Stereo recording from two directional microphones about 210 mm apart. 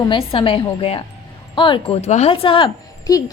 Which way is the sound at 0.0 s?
20° left (ahead or behind).